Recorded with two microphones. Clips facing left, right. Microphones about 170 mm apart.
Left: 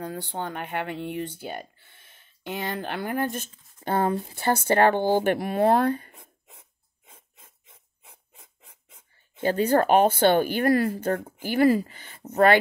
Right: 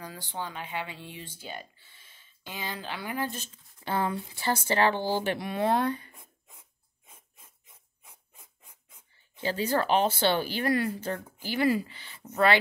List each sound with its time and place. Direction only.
0.0 s speech: 60° left (ahead or behind)
6.1 s a sound: 30° left (ahead or behind)
7.1 s filing: 30° left (ahead or behind)
9.4 s speech: 55° left (ahead or behind)